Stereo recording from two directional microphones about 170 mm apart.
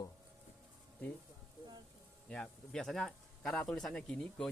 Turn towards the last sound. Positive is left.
turn(degrees=5)  # may be behind; listen again after turning